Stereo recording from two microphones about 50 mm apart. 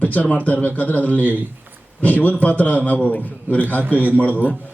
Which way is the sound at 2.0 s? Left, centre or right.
Left.